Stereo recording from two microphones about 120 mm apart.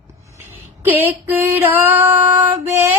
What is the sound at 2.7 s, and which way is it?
Mantra, 20° right (ahead or behind).